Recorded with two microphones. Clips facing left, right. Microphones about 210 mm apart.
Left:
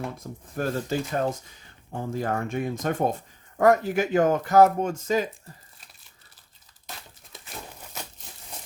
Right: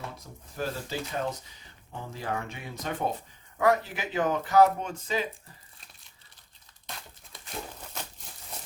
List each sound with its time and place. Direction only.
0.5 s speech: 50° left (ahead or behind)